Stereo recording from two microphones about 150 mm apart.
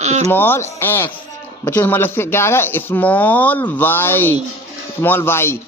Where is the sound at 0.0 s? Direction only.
50° right (ahead or behind).